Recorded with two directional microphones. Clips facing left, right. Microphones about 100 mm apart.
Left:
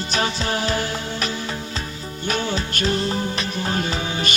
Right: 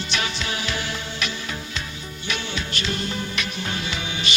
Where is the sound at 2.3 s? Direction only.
40° left (ahead or behind).